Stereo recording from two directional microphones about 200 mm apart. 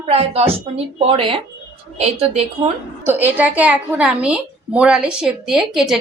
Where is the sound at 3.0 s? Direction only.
10° right (ahead or behind).